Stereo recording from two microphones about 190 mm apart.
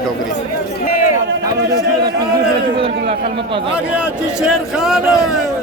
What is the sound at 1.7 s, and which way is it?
Speech, 20° right (ahead or behind).